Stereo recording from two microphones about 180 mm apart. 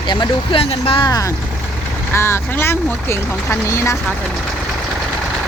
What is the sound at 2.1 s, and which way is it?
Speech, 15° left (ahead or behind).